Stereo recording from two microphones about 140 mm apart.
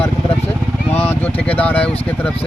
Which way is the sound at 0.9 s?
10° left (ahead or behind).